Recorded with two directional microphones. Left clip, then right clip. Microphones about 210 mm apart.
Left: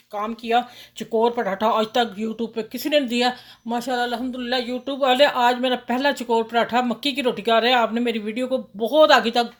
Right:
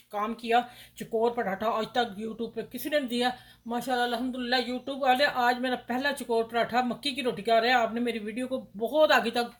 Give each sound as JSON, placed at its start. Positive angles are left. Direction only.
{"t": 0.1, "sound": "speech", "side_deg": 30}